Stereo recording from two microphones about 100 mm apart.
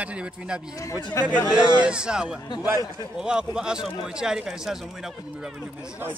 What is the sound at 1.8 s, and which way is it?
Speech, 10° right (ahead or behind).